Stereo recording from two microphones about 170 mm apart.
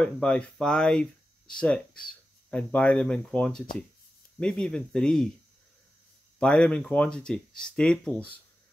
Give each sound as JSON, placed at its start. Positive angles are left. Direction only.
{"t": 0.0, "sound": "speech", "side_deg": 5}
{"t": 6.4, "sound": "speech", "side_deg": 5}